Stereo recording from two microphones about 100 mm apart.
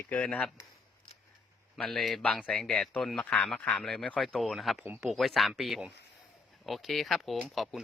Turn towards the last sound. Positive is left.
turn(degrees=0)  # may be behind; listen again after turning